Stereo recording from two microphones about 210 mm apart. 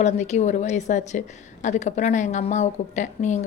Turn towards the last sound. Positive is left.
turn(degrees=35)  # may be behind; listen again after turning